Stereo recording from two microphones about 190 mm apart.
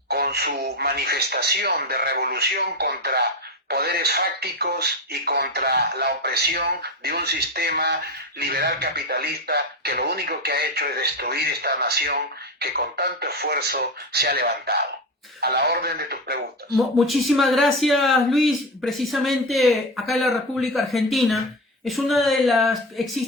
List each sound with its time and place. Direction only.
0.1 s speech: 55° right (ahead or behind)
16.7 s speech: centre (ahead or behind)